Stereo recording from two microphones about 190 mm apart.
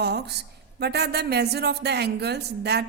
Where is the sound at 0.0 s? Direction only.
60° right (ahead or behind).